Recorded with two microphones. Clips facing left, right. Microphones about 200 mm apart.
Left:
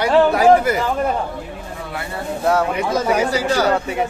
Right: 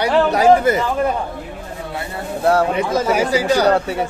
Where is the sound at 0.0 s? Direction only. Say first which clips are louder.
Left 1 dB; 20° right (ahead or behind).